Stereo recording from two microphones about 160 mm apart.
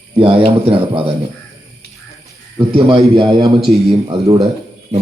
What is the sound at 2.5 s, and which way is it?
A man's voice, 30° right (ahead or behind).